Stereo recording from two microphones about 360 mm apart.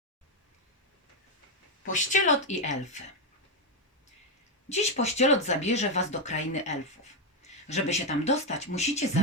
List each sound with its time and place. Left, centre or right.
1.9 s speech: centre
4.7 s speech: centre